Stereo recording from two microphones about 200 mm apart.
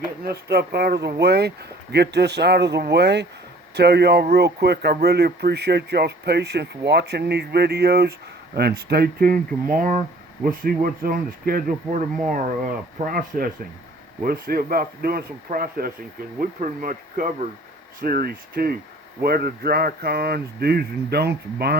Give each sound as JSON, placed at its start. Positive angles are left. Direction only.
{"t": 0.3, "sound": "speech", "side_deg": -55}